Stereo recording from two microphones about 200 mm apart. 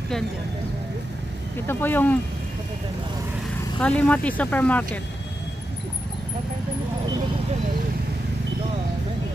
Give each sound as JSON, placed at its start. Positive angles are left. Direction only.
{"t": 1.7, "sound": "speech", "side_deg": 10}
{"t": 3.8, "sound": "speech", "side_deg": 5}